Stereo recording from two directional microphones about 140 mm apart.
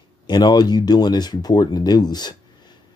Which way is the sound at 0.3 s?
30° left (ahead or behind).